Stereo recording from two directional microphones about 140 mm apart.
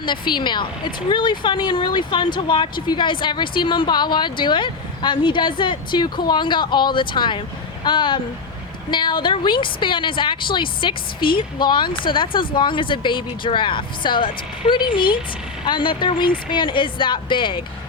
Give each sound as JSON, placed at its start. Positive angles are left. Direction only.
{"t": 0.0, "sound": "speech", "side_deg": 35}